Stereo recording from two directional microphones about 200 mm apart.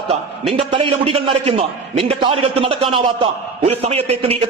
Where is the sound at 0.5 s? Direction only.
25° right (ahead or behind).